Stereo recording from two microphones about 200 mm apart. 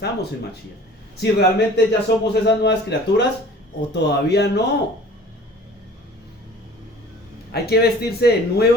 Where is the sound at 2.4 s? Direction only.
60° left (ahead or behind).